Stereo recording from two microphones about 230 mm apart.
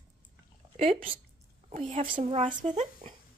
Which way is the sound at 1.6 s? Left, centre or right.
Right.